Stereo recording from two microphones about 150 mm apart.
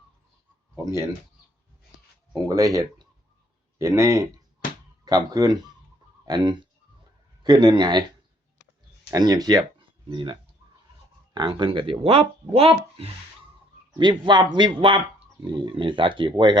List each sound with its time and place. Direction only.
2.5 s speech: 20° right (ahead or behind)
9.0 s speech: 25° right (ahead or behind)
11.3 s speech: 30° right (ahead or behind)
14.0 s speech: 30° right (ahead or behind)